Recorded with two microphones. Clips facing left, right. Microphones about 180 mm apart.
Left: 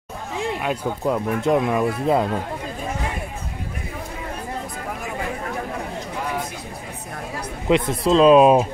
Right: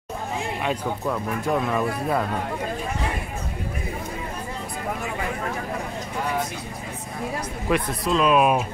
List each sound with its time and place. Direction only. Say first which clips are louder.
1.0 s speech: left 7 dB; 20° left (ahead or behind)
7.6 s speech: left 6 dB; 20° left (ahead or behind)